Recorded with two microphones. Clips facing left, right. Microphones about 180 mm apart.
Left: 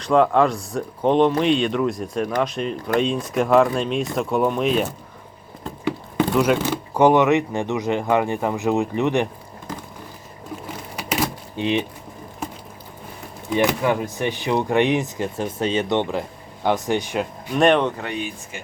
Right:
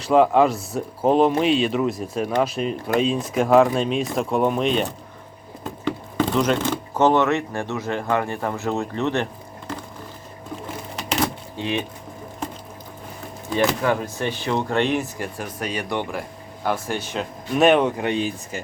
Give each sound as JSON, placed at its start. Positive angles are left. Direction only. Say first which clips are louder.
{"t": 0.0, "sound": "speech", "louder": "right 1 dB", "side_deg": -5}
{"t": 11.5, "sound": "speech", "louder": "left 4 dB", "side_deg": 20}
{"t": 13.5, "sound": "speech", "louder": "left 1 dB", "side_deg": 15}
{"t": 17.6, "sound": "speech", "louder": "right 1 dB", "side_deg": -5}
{"t": 18.0, "sound": "speech", "louder": "right 5 dB", "side_deg": -30}